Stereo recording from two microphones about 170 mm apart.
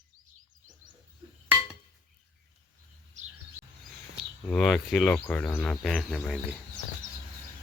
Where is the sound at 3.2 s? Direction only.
45° right (ahead or behind).